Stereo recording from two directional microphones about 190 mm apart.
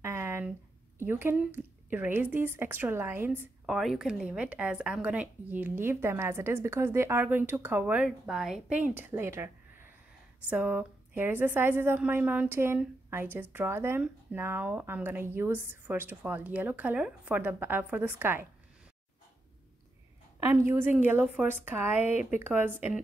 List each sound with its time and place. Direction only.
0.0 s a sound: 15° right (ahead or behind)
0.9 s a woman's voice: 10° right (ahead or behind)
20.4 s a woman's voice: 10° right (ahead or behind)
22.0 s a woman's voice: 40° left (ahead or behind)